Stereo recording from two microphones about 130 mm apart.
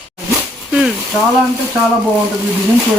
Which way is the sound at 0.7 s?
5° right (ahead or behind).